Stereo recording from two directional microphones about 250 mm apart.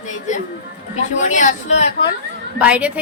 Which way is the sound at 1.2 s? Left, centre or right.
Left.